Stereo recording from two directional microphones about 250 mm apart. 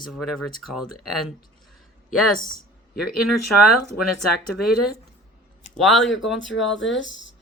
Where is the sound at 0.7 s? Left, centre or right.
Left.